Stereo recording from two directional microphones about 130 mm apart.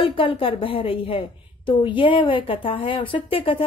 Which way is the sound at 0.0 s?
40° left (ahead or behind).